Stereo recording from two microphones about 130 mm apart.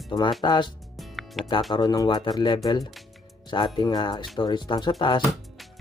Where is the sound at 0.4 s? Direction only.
35° left (ahead or behind).